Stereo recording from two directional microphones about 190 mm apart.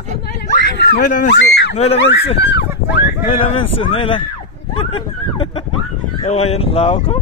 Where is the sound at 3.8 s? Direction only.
30° left (ahead or behind).